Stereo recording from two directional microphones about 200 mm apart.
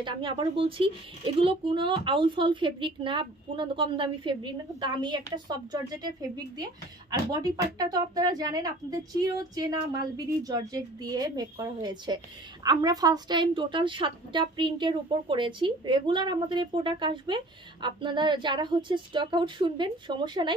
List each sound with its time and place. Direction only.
0.0 s speech: 25° right (ahead or behind)